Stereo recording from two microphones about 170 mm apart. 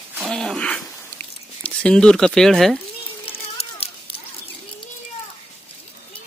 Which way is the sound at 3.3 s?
35° left (ahead or behind).